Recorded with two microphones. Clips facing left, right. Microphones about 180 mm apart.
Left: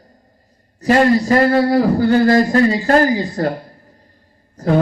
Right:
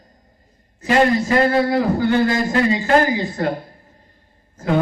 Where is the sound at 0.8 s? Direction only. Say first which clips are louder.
Left 3 dB; 40° left (ahead or behind).